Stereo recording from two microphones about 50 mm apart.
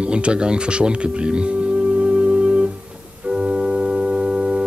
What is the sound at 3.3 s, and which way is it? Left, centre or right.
Organ, centre.